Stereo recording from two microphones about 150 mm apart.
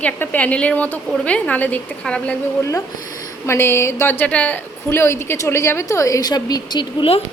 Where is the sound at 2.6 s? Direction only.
20° left (ahead or behind); by 7.2 s 35° left (ahead or behind).